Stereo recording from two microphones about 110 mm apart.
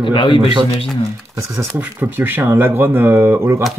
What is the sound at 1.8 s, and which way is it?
Speech, 15° right (ahead or behind).